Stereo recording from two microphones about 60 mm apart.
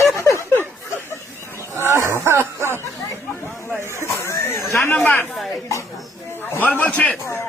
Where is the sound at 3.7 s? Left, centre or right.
Right.